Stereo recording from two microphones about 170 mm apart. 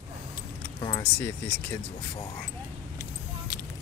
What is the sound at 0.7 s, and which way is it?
Keys jangling, 25° left (ahead or behind).